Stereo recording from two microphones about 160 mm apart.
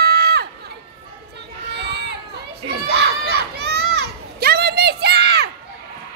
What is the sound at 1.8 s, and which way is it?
Run, 90° right.